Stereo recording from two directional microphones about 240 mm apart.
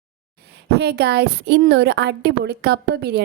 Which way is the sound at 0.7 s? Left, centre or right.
Right.